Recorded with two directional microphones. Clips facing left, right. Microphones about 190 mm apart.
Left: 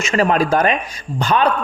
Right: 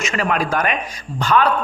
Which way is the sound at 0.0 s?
35° left (ahead or behind).